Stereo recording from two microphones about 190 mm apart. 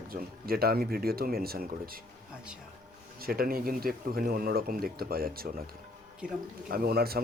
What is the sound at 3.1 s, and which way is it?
Speech, 50° right (ahead or behind).